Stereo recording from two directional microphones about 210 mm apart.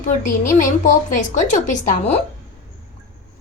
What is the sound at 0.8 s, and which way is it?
Speech, 35° left (ahead or behind).